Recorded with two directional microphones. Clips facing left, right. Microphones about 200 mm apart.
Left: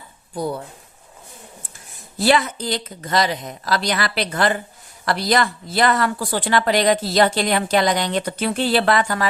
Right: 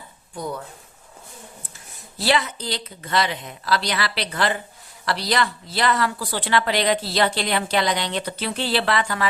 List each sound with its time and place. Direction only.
0.3 s speech: 30° left (ahead or behind)
2.1 s speech: 50° left (ahead or behind)